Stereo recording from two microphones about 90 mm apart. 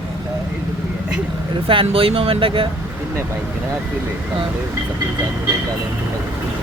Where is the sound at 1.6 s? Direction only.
85° right.